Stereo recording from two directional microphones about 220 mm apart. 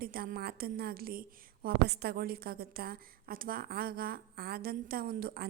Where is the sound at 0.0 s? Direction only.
40° right (ahead or behind).